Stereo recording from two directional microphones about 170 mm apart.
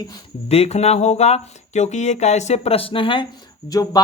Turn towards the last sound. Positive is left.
turn(degrees=20)  # may be behind; listen again after turning